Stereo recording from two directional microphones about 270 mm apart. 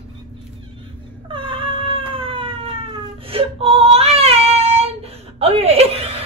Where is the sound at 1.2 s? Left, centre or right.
Centre.